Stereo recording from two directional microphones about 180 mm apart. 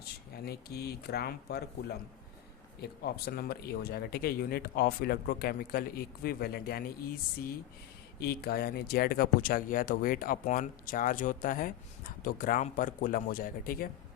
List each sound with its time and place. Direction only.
0.0 s speech: 60° left (ahead or behind)